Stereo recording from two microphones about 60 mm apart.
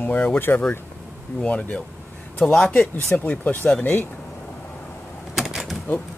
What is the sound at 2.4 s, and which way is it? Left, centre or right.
Speech, centre.